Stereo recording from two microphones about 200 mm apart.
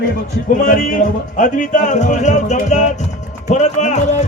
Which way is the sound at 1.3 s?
40° left (ahead or behind).